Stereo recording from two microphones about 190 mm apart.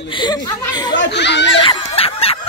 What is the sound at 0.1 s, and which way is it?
Speech, 25° left (ahead or behind).